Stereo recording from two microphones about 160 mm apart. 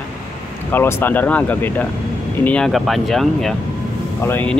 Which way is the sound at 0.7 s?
15° left (ahead or behind).